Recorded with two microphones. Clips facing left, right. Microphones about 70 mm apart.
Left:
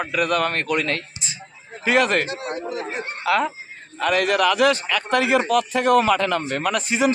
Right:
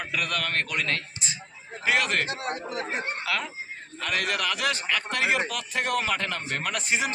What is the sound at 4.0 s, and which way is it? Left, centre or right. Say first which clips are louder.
A man's voice: left 10 dB; left.